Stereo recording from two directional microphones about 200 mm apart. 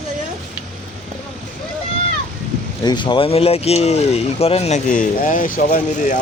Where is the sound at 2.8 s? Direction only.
20° left (ahead or behind); by 6.2 s 40° left (ahead or behind).